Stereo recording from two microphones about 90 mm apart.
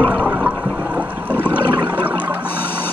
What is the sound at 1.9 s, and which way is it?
Toilet flush, 20° right (ahead or behind).